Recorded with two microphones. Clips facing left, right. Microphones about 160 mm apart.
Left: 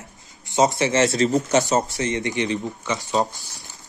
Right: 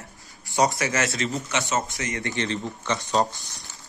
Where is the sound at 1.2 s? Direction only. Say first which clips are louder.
Left 9 dB; 40° left (ahead or behind).